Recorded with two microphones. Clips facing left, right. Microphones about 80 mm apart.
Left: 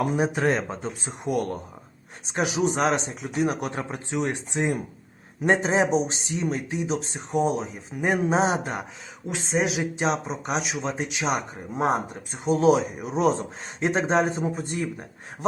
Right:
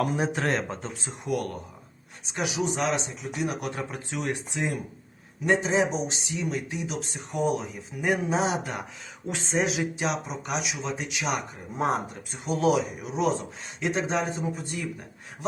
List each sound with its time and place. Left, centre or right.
0.2 s speech: centre
1.0 s speech: left
5.5 s speech: left
9.2 s speech: centre
10.0 s speech: left